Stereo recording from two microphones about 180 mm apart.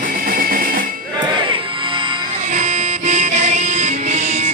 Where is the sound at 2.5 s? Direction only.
40° right (ahead or behind).